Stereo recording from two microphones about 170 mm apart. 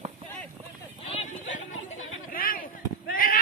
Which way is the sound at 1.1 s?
40° left (ahead or behind).